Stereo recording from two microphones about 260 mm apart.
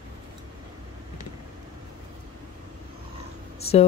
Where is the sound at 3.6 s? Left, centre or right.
Left.